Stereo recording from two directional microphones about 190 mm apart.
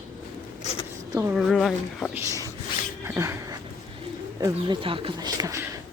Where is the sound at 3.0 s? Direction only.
15° right (ahead or behind).